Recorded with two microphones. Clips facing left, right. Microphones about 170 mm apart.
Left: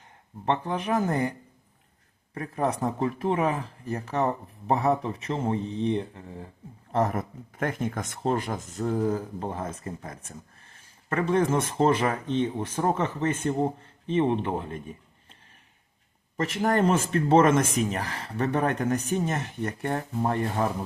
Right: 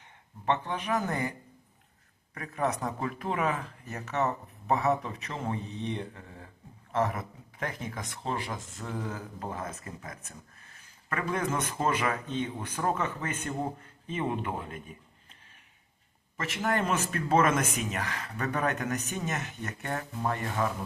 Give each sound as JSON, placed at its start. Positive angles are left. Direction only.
{"t": 0.4, "sound": "speech", "side_deg": 30}
{"t": 2.3, "sound": "speech", "side_deg": 30}
{"t": 6.9, "sound": "speech", "side_deg": 40}
{"t": 16.4, "sound": "speech", "side_deg": 35}